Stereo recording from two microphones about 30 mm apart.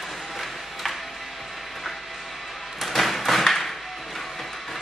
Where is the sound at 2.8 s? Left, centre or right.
Centre.